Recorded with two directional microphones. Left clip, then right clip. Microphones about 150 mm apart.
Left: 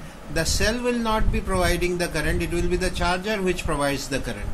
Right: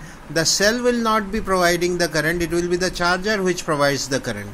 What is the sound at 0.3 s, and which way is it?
Speech, 45° right (ahead or behind).